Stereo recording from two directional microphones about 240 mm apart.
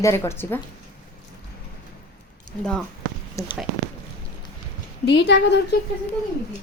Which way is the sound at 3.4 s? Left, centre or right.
Centre.